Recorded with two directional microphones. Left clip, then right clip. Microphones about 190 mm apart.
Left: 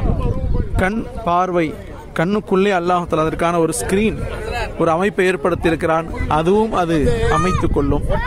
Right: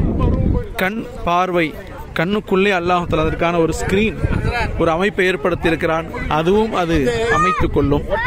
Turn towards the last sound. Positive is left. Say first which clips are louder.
# right 2 dB
turn(degrees=5)  # may be behind; listen again after turning